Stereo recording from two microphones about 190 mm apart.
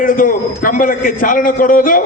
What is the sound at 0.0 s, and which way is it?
A man's voice, 45° left (ahead or behind).